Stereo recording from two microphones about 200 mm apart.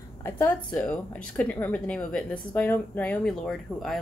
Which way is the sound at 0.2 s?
10° left (ahead or behind).